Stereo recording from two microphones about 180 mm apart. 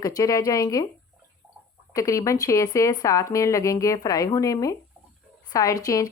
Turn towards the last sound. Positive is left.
turn(degrees=20)  # may be behind; listen again after turning